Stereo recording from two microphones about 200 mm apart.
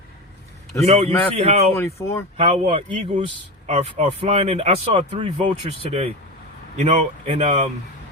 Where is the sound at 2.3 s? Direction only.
30° right (ahead or behind).